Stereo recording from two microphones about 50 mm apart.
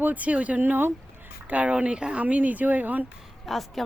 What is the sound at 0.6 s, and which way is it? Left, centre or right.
Speech, right.